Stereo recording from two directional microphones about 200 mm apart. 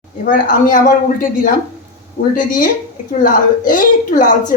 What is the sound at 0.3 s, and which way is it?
A woman's voice, 45° left (ahead or behind).